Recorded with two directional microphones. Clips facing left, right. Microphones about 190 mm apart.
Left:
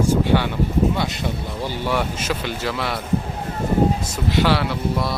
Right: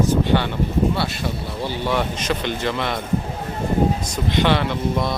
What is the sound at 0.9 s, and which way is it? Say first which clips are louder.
Speech: even; 20° left (ahead or behind).